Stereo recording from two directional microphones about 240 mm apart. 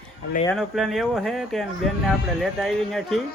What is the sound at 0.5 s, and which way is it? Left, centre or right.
Speech, centre.